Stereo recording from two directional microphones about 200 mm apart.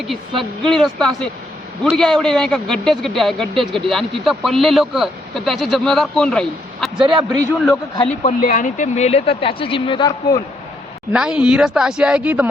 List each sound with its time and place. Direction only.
0.1 s speech: centre (ahead or behind)
7.0 s a man's voice: 25° right (ahead or behind)
8.2 s speech: 40° left (ahead or behind); by 10.1 s 25° left (ahead or behind)
11.1 s speech: 5° right (ahead or behind)